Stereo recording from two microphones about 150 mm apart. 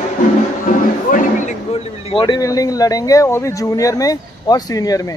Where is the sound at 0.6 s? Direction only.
60° left (ahead or behind).